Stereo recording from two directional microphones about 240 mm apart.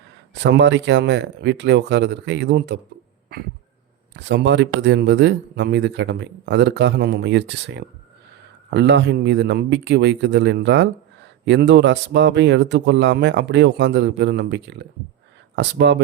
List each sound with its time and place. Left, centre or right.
0.3 s speech: right
4.1 s speech: right